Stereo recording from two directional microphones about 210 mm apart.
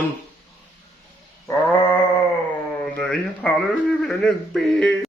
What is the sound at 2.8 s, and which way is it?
Speech, 5° left (ahead or behind).